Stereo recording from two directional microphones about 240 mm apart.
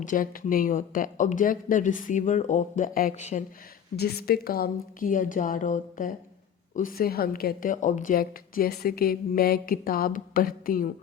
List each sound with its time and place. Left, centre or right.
0.0 s a woman's voice: left
3.9 s a woman's voice: left